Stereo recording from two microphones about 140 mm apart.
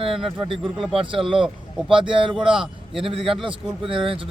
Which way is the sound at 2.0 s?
35° right (ahead or behind).